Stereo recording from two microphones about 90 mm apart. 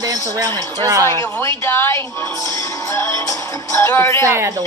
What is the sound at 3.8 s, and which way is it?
Speech, 30° left (ahead or behind).